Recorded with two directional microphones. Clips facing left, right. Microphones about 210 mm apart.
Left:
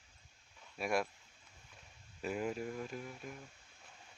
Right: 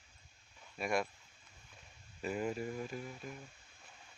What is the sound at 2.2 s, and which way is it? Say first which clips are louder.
Speech: right 1 dB; centre (ahead or behind).